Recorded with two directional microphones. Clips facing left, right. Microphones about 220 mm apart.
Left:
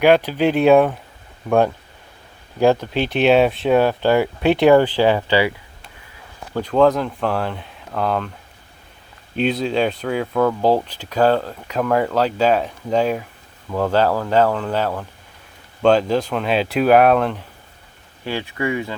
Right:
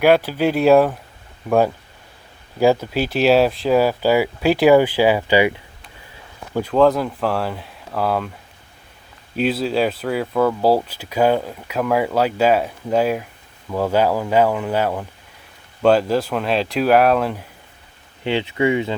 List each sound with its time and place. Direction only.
0.3 s speech: 5° right (ahead or behind)
9.3 s speech: 5° right (ahead or behind)
18.2 s speech: 20° right (ahead or behind)